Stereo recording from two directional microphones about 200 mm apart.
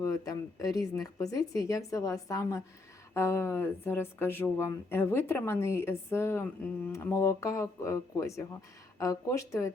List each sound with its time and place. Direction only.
0.0 s speech: 15° left (ahead or behind)